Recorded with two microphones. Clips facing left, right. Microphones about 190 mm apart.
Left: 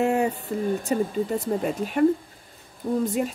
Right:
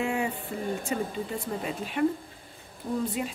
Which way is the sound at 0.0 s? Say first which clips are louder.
Left 7 dB; 45° left (ahead or behind).